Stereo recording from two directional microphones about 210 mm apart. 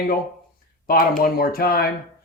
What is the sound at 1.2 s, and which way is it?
Speech, 45° left (ahead or behind).